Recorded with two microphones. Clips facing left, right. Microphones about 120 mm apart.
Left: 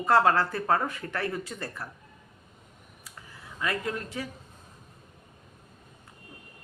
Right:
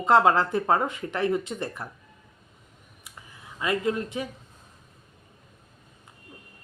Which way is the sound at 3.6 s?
20° right (ahead or behind).